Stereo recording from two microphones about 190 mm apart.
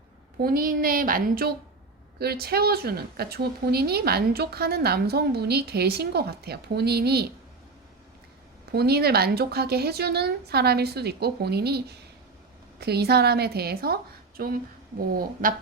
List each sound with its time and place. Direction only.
0.3 s a woman's voice: 50° right (ahead or behind)
8.7 s a woman's voice: 55° right (ahead or behind)